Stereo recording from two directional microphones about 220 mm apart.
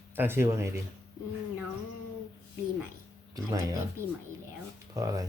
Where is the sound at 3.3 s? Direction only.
15° right (ahead or behind).